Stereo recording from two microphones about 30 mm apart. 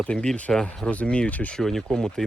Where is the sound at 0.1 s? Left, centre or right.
Left.